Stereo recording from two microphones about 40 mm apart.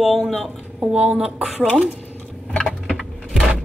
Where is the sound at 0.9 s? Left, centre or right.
Right.